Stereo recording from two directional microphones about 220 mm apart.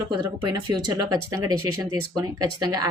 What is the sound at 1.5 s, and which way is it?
Speech, 90° right.